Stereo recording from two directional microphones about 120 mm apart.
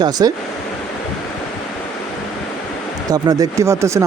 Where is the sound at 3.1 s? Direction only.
30° right (ahead or behind).